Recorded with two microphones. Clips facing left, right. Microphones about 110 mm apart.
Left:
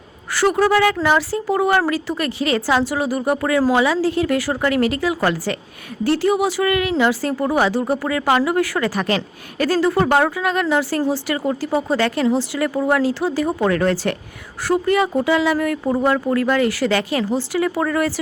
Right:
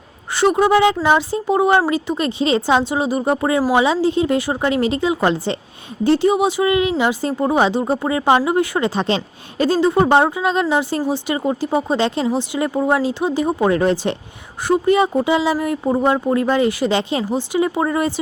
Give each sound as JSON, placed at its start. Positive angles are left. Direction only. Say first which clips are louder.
{"t": 0.3, "sound": "speech", "louder": "right 2 dB", "side_deg": -20}